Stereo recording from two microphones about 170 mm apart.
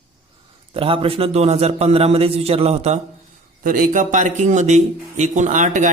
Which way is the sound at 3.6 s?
55° right (ahead or behind).